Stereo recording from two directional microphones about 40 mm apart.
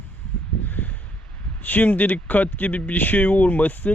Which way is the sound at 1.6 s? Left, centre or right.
Left.